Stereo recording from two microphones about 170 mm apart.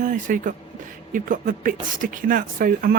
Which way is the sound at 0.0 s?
50° right (ahead or behind).